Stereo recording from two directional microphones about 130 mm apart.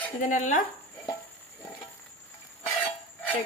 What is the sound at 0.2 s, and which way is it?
Speech, 75° left (ahead or behind).